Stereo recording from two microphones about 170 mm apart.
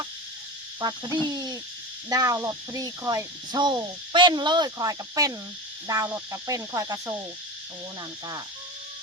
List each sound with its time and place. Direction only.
0.8 s speech: 20° right (ahead or behind)
1.3 s hoot: 20° right (ahead or behind)
2.0 s speech: 20° right (ahead or behind)
5.9 s cricket: 20° right (ahead or behind)